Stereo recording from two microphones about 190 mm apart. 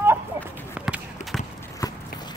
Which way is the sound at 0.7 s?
5° right (ahead or behind).